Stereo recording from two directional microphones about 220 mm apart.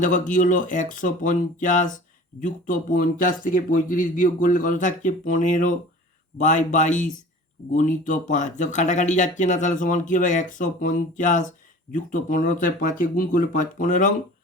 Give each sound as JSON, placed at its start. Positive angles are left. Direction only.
{"t": 0.0, "sound": "speech", "side_deg": 35}